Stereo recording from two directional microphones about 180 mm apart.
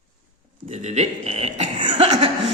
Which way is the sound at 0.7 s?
35° right (ahead or behind).